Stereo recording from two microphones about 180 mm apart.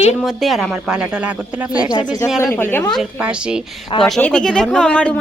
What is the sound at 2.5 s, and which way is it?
Speech, 10° left (ahead or behind).